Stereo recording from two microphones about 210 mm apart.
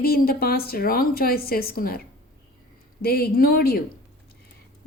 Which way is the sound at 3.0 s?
45° left (ahead or behind).